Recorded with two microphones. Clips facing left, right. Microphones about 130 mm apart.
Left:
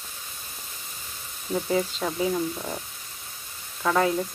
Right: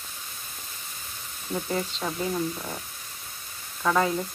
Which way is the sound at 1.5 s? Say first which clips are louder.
Left 4 dB; 5° left (ahead or behind).